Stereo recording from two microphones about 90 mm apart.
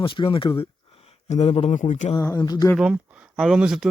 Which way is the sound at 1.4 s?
90° left.